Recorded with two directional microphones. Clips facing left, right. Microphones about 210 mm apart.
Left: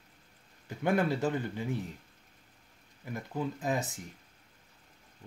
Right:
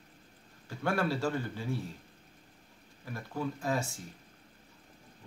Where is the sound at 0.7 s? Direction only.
20° left (ahead or behind).